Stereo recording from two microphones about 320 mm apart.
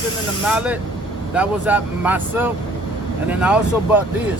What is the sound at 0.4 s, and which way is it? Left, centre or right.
Speech, centre.